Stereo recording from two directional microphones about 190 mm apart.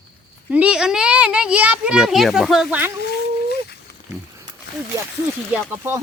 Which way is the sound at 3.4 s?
60° left (ahead or behind).